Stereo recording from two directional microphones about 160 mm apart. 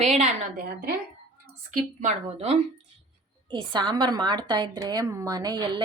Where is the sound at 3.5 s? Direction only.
30° right (ahead or behind).